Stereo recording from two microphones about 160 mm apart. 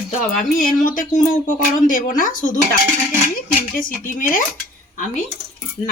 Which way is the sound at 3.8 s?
60° left (ahead or behind).